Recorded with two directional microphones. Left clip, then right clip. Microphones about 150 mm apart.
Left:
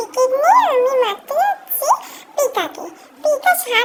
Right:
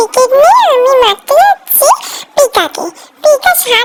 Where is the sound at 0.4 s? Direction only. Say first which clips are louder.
Right 4 dB; 35° right (ahead or behind).